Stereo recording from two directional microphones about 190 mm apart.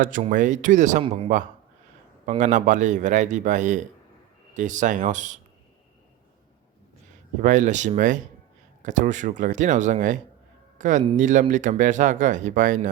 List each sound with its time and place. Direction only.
0.0 s speech: 45° right (ahead or behind)
7.4 s speech: 40° right (ahead or behind)